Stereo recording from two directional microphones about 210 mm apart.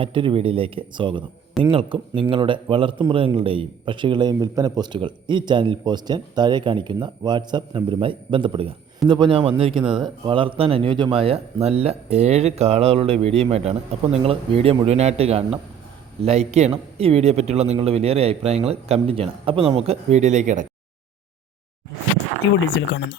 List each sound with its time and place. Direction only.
0.0 s a man's voice: 25° right (ahead or behind)
22.4 s speech: 60° left (ahead or behind)